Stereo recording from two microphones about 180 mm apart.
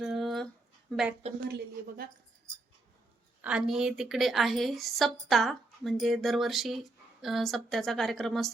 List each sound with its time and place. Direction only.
0.0 s a sound: centre (ahead or behind)
0.9 s a woman's voice: centre (ahead or behind)
1.4 s speech: 60° right (ahead or behind)
3.4 s a woman's voice: 5° right (ahead or behind)